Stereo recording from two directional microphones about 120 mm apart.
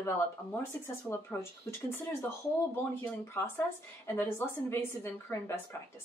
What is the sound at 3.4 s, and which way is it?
A woman's voice, 20° left (ahead or behind).